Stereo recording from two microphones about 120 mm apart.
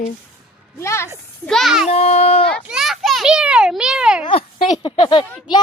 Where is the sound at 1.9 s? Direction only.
60° left (ahead or behind).